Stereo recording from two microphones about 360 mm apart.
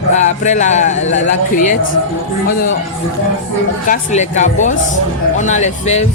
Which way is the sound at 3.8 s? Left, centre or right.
Centre.